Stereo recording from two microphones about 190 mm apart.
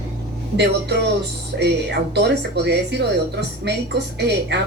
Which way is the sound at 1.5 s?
65° right (ahead or behind).